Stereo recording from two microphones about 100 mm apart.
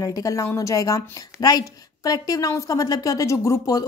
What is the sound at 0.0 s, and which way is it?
A woman's voice, 35° left (ahead or behind).